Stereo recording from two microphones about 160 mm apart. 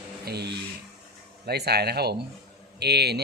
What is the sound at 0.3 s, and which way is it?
Speech, 90° right.